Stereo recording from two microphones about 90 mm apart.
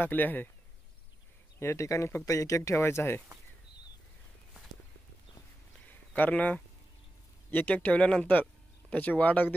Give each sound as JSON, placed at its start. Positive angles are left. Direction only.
{"t": 0.0, "sound": "speech", "side_deg": 20}
{"t": 1.6, "sound": "speech", "side_deg": 30}
{"t": 5.9, "sound": "a sound", "side_deg": 20}
{"t": 7.5, "sound": "speech", "side_deg": 20}